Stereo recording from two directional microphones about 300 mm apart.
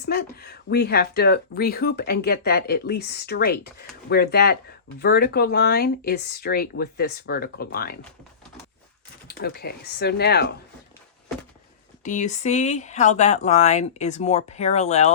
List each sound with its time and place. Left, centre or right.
0.0 s speech: left
9.2 s speech: left
12.0 s speech: left